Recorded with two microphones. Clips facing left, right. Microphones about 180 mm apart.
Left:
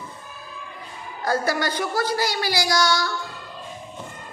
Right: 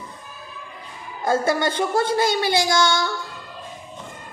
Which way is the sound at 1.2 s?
25° right (ahead or behind).